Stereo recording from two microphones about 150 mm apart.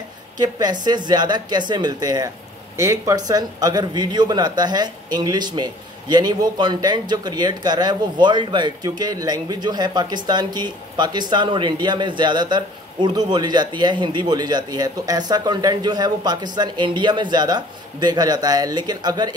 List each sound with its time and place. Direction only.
0.4 s speech: 30° right (ahead or behind)